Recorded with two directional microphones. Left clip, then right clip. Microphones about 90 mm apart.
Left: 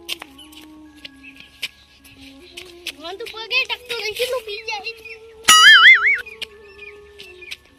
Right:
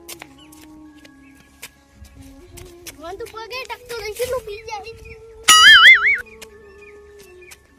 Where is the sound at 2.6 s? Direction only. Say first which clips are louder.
Left 4 dB; 10° right (ahead or behind).